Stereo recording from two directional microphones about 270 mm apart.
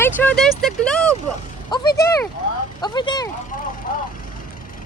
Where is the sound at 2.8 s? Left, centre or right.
Centre.